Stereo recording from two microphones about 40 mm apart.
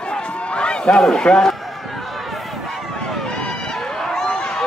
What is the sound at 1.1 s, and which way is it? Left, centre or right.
Speech, left.